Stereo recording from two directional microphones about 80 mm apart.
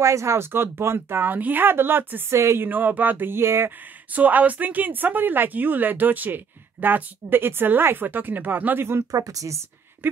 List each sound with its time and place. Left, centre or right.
0.0 s speech: right
4.1 s speech: centre
9.1 s speech: right